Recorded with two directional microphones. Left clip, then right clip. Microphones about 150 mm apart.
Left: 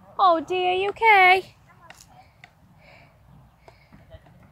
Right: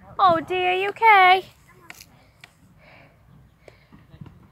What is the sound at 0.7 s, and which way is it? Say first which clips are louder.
Speech: right 2 dB; 25° left (ahead or behind).